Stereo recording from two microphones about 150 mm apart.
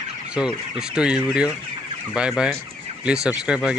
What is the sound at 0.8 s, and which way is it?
Speech, 5° right (ahead or behind).